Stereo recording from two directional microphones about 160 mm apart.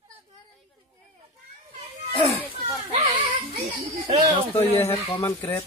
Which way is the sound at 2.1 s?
40° left (ahead or behind).